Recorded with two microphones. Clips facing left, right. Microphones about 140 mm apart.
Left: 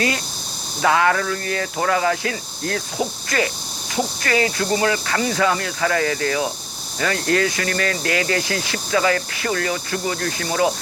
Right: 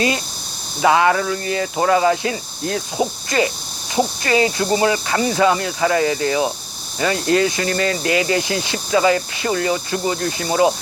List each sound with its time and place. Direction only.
0.8 s speech: 20° right (ahead or behind)